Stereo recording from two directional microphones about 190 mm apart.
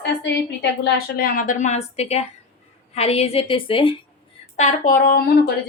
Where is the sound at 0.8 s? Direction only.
50° left (ahead or behind); by 3.9 s 30° left (ahead or behind).